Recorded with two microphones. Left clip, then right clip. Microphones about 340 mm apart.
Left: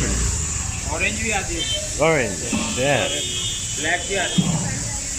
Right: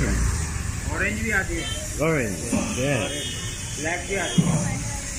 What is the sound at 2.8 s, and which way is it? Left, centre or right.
Speech, left.